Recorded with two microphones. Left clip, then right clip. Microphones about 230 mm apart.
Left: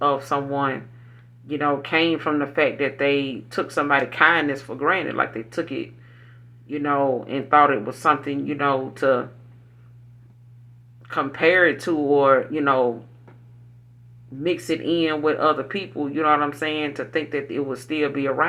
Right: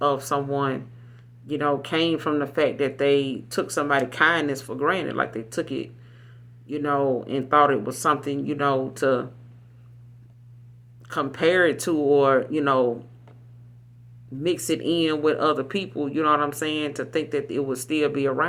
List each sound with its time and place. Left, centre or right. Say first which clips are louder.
0.0 s speech: left 2 dB; right
11.0 s speech: left 3 dB; right
14.4 s speech: left 1 dB; right